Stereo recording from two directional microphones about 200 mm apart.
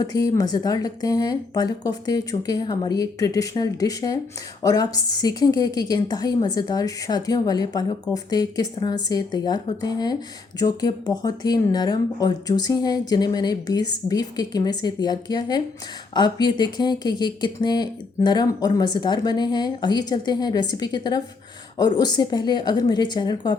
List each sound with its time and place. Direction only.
0.0 s speech: 20° left (ahead or behind)